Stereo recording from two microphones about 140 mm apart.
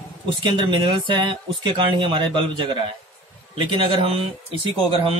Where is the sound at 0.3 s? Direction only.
35° right (ahead or behind).